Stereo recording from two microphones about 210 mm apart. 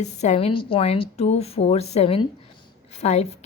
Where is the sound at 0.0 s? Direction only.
35° left (ahead or behind).